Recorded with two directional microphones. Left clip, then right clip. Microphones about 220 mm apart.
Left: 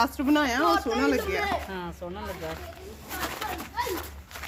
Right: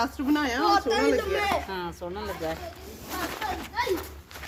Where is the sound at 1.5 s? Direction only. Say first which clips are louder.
Right 3 dB; 35° right (ahead or behind).